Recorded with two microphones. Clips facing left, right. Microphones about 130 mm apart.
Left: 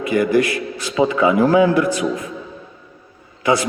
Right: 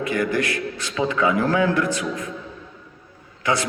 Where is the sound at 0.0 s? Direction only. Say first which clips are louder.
Left 6 dB; 10° left (ahead or behind).